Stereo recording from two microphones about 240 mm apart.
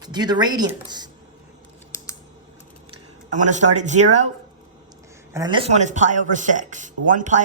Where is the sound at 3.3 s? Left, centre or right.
Right.